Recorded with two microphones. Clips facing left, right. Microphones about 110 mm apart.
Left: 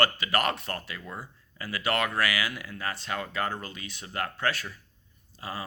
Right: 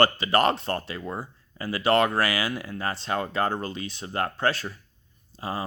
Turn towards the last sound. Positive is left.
turn(degrees=-30)  # may be behind; listen again after turning